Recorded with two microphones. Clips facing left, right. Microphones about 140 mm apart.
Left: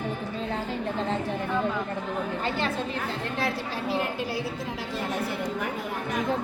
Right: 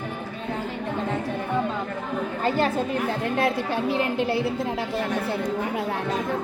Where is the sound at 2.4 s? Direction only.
45° right (ahead or behind).